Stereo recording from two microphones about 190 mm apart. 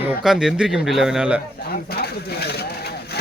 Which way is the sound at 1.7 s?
55° left (ahead or behind).